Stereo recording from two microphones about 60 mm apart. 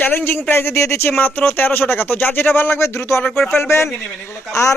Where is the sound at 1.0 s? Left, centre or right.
Left.